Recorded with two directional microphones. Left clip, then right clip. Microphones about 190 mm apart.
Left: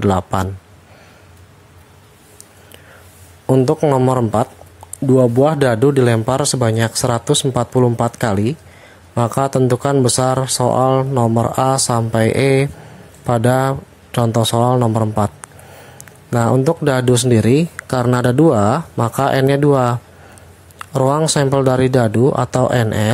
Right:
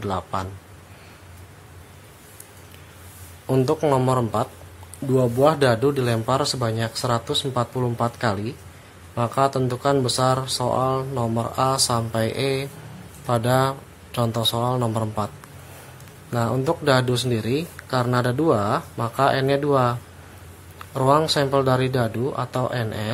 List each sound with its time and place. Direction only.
0.0 s speech: 45° left (ahead or behind)
3.4 s speech: 35° left (ahead or behind)